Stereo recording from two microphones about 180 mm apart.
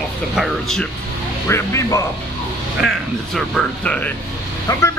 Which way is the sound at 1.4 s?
15° left (ahead or behind).